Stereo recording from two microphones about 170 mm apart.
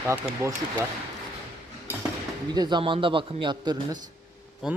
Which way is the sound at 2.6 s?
25° right (ahead or behind).